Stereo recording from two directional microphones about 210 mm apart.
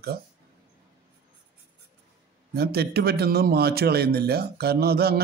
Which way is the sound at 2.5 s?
50° right (ahead or behind).